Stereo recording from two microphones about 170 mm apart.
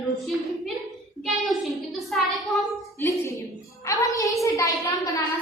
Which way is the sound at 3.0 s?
15° left (ahead or behind).